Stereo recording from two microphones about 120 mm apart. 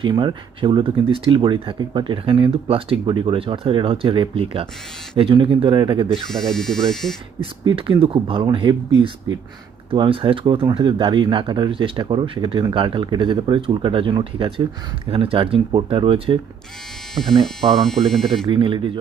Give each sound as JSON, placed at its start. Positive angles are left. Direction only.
{"t": 0.0, "sound": "speech", "side_deg": -40}
{"t": 6.1, "sound": "speech", "side_deg": 5}
{"t": 7.3, "sound": "speech", "side_deg": -45}
{"t": 17.8, "sound": "speech", "side_deg": 5}
{"t": 18.4, "sound": "speech", "side_deg": -45}